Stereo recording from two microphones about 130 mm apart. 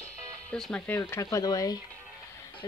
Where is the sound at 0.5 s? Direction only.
5° left (ahead or behind).